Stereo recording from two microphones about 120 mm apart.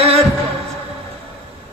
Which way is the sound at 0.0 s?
55° right (ahead or behind).